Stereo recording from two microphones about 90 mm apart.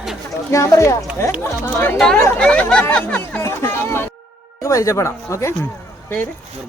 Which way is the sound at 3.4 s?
30° left (ahead or behind).